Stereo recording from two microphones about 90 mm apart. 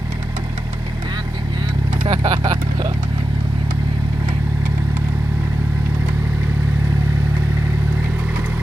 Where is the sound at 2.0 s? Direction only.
55° right (ahead or behind).